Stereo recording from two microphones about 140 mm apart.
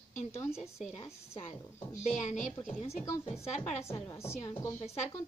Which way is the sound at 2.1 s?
60° left (ahead or behind).